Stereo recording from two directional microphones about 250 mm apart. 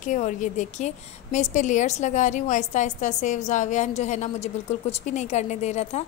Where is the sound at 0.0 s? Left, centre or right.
Left.